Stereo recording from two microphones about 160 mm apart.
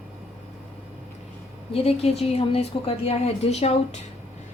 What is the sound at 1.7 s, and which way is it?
A woman's voice, 40° left (ahead or behind).